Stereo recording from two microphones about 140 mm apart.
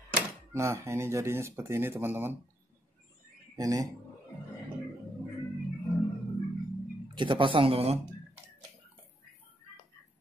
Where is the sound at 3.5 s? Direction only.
25° right (ahead or behind).